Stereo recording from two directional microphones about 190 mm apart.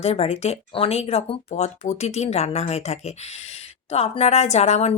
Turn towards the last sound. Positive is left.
turn(degrees=35)  # may be behind; listen again after turning